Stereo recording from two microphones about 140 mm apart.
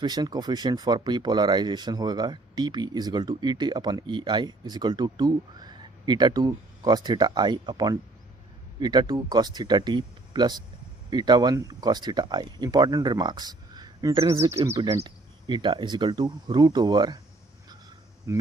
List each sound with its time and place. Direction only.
0.0 s speech: 30° right (ahead or behind)
18.3 s speech: 20° right (ahead or behind)